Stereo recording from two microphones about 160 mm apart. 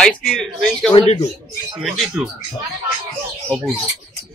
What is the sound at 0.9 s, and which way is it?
Speech, 40° left (ahead or behind).